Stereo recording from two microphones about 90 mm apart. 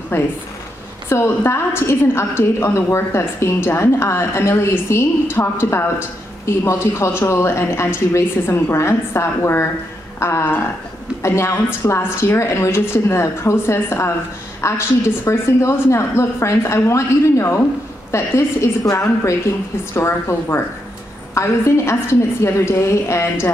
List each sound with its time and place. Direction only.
0.1 s a woman's voice: 25° left (ahead or behind)
10.1 s a sound: 30° left (ahead or behind)
11.2 s a woman's voice: 30° left (ahead or behind)